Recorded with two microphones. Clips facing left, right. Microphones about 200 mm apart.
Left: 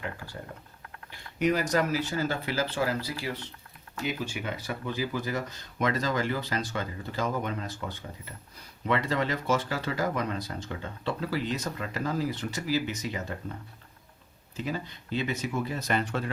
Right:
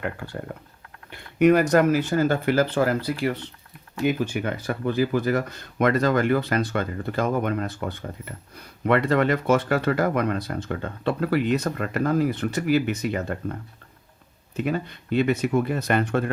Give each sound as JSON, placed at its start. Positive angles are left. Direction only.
{"t": 0.5, "sound": "speech", "side_deg": -60}